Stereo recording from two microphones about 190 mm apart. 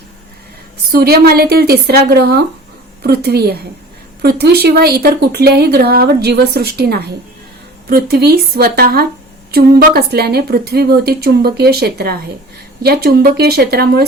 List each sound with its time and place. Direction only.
0.9 s a woman's voice: 55° right (ahead or behind)